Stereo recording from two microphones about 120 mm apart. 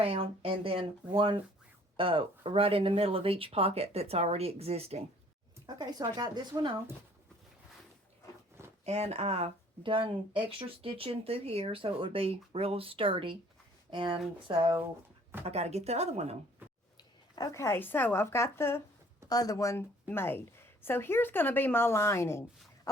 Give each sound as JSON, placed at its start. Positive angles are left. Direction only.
{"t": 0.0, "sound": "speech", "side_deg": -50}
{"t": 5.6, "sound": "speech", "side_deg": -35}
{"t": 8.8, "sound": "speech", "side_deg": -65}
{"t": 15.4, "sound": "speech", "side_deg": -65}
{"t": 17.3, "sound": "a woman's voice", "side_deg": 30}
{"t": 19.3, "sound": "a woman's voice", "side_deg": 30}